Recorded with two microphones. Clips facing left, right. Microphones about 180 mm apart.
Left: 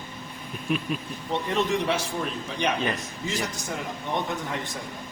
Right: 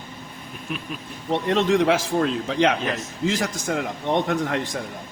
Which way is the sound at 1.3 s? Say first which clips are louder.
Right 6 dB; 85° right.